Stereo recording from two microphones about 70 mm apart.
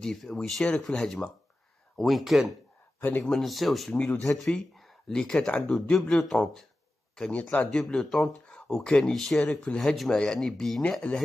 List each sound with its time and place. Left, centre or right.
0.0 s speech: centre
3.0 s speech: left
3.3 s speech: centre
3.9 s speech: centre
4.7 s speech: centre
9.4 s speech: centre
9.8 s speech: centre